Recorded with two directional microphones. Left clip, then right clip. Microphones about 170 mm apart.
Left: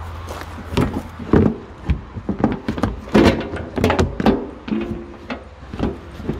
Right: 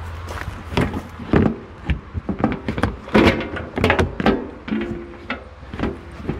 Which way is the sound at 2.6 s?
20° left (ahead or behind).